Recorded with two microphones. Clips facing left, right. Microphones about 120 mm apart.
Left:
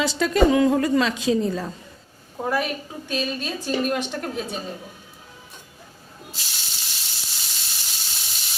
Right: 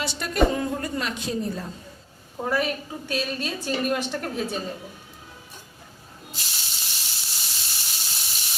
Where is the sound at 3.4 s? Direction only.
Centre (ahead or behind).